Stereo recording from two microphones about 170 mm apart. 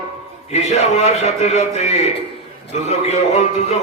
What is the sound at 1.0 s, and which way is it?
Speech, 40° left (ahead or behind).